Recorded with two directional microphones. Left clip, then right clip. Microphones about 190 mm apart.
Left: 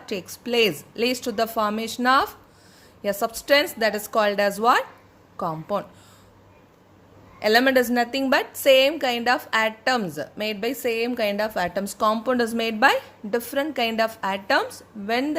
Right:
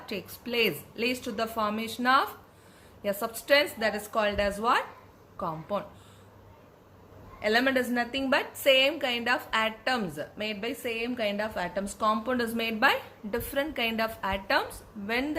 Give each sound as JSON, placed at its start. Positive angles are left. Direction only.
{"t": 0.0, "sound": "a woman's voice", "side_deg": 45}
{"t": 7.3, "sound": "a woman's voice", "side_deg": 55}